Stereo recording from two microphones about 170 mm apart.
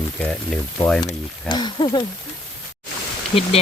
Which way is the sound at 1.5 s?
25° left (ahead or behind).